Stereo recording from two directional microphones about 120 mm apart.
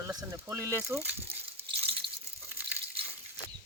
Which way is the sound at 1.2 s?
60° right (ahead or behind).